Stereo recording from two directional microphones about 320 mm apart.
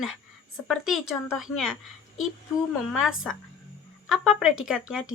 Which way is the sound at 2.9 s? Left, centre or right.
Centre.